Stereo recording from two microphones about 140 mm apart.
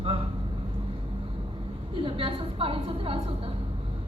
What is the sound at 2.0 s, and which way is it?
A woman's voice, 40° right (ahead or behind).